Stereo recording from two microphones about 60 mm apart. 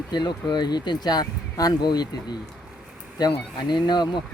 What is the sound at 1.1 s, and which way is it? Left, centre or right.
Speech, left.